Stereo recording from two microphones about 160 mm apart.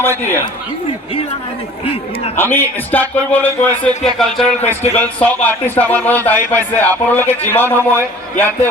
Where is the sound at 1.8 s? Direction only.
35° left (ahead or behind).